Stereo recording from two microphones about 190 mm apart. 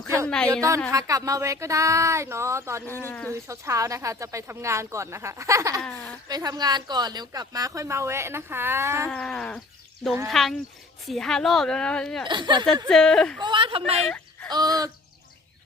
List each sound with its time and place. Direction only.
0.3 s a woman's voice: 5° left (ahead or behind)
0.9 s speech: 15° right (ahead or behind)
2.8 s speech: 10° left (ahead or behind)
3.4 s speech: 15° right (ahead or behind)
5.8 s a woman's voice: 5° left (ahead or behind)
6.2 s speech: 20° right (ahead or behind)
9.0 s a woman's voice: 5° left (ahead or behind)
12.3 s a man's voice: 25° right (ahead or behind)
12.9 s a woman's voice: 5° left (ahead or behind)
13.4 s a man's voice: 25° right (ahead or behind)
14.5 s a man's voice: 20° right (ahead or behind)